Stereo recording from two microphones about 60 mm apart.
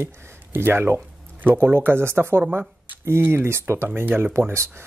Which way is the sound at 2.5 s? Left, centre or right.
Right.